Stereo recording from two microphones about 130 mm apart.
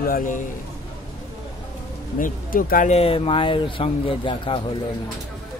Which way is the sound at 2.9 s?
50° left (ahead or behind).